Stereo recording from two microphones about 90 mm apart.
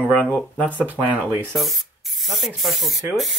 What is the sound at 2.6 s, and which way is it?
Speech, centre (ahead or behind).